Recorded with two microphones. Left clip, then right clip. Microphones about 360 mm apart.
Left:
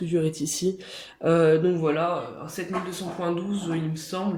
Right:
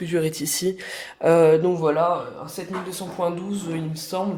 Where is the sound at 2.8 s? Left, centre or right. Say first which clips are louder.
Right 3 dB; centre.